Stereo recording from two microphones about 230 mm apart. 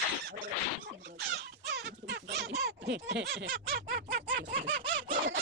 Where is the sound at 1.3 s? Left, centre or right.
Right.